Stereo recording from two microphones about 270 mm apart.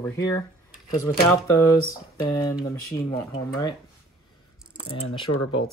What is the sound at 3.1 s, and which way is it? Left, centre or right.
Speech, centre.